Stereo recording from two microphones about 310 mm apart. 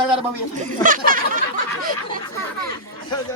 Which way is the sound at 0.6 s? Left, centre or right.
Right.